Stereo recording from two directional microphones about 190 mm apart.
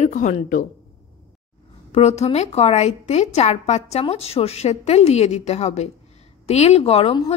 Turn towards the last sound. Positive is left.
turn(degrees=30)  # may be behind; listen again after turning